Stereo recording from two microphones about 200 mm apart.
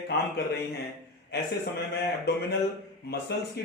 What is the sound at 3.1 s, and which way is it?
Speech, 55° left (ahead or behind).